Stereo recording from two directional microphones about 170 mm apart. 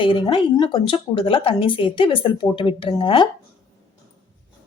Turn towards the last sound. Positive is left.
turn(degrees=30)  # may be behind; listen again after turning